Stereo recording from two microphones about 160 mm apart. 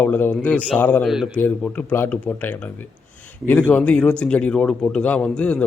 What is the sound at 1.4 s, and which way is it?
A man's voice, 10° left (ahead or behind).